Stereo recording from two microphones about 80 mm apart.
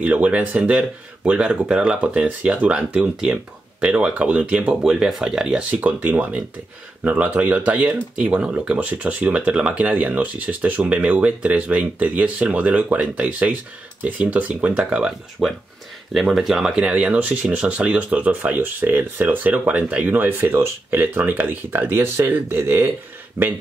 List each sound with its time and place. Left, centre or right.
0.0 s speech: centre
5.6 s speech: centre
15.4 s speech: centre; by 23.5 s right